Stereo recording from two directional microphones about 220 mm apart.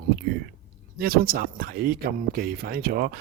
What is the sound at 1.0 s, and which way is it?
Speech, 45° right (ahead or behind).